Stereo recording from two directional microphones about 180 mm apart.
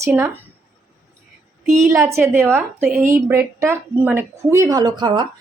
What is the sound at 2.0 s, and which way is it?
Speech, 15° right (ahead or behind).